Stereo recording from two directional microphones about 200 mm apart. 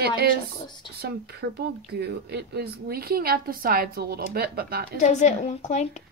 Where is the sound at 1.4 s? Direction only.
55° right (ahead or behind).